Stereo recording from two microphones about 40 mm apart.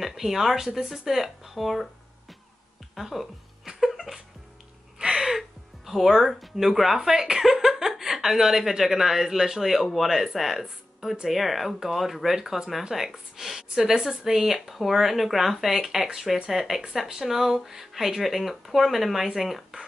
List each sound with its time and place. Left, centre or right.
0.0 s speech: centre
3.0 s speech: centre
3.6 s a sound: centre
4.9 s gasp: centre
5.2 s a woman's voice: centre